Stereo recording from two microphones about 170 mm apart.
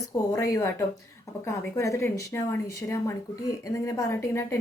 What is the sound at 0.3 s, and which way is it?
Speech, 20° left (ahead or behind).